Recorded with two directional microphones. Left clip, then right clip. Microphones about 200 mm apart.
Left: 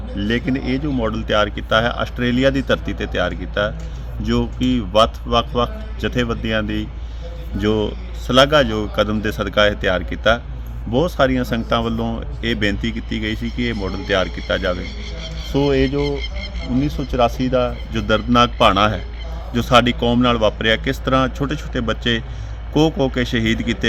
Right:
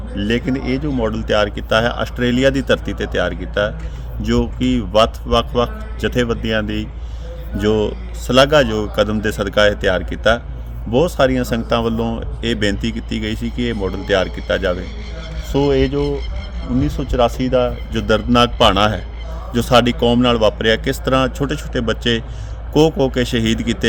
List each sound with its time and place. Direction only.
0.2 s speech: 20° right (ahead or behind)